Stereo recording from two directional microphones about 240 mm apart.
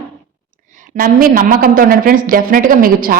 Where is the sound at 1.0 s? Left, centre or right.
Right.